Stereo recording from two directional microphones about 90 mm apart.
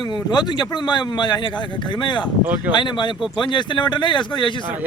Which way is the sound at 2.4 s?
20° right (ahead or behind).